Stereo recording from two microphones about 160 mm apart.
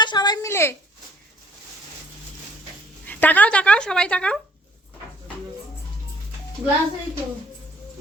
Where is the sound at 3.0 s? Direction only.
10° left (ahead or behind).